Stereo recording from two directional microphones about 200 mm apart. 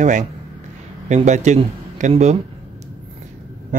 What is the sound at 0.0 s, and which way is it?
A man's voice, 35° right (ahead or behind).